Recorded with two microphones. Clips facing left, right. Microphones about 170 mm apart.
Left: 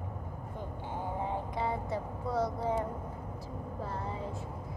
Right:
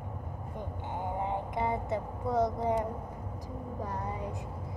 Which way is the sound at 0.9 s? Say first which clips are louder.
Right 2 dB; 20° right (ahead or behind).